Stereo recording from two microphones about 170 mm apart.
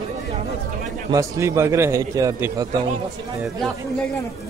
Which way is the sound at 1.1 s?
15° right (ahead or behind).